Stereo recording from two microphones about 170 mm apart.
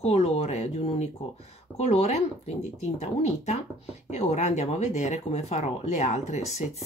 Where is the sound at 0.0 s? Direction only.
40° left (ahead or behind).